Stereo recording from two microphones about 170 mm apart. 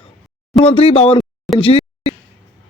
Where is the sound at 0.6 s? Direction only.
35° left (ahead or behind).